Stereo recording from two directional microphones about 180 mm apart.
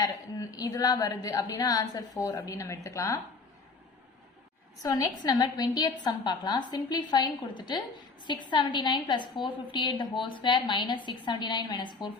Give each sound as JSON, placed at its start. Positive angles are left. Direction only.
{"t": 0.0, "sound": "a woman's voice", "side_deg": 20}
{"t": 4.8, "sound": "a woman's voice", "side_deg": 20}